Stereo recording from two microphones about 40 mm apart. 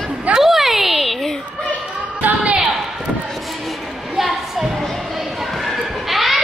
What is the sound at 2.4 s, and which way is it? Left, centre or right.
Basketball bounce, right.